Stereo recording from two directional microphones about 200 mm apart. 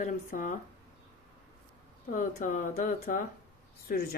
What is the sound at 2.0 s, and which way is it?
Speech, 40° left (ahead or behind).